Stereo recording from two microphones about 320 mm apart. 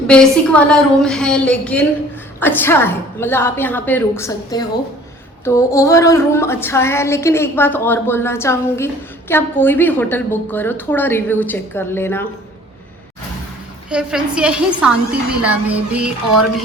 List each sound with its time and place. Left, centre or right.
0.1 s a woman's voice: centre
13.9 s a woman's voice: centre